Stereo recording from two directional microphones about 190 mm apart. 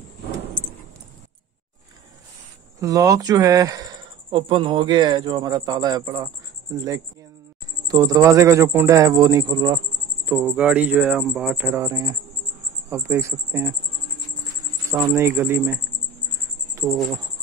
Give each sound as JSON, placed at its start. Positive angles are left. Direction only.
{"t": 2.8, "sound": "speech", "side_deg": -15}
{"t": 7.9, "sound": "speech", "side_deg": -20}
{"t": 10.2, "sound": "speech", "side_deg": -10}
{"t": 14.9, "sound": "speech", "side_deg": -15}
{"t": 16.7, "sound": "insect", "side_deg": -15}